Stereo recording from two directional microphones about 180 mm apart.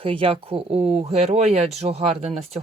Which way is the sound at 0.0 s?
30° right (ahead or behind).